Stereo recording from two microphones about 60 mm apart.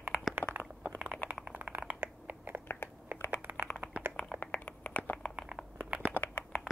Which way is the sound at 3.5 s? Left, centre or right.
Right.